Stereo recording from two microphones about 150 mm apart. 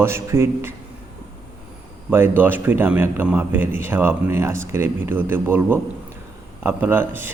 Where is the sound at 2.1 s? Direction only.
15° right (ahead or behind).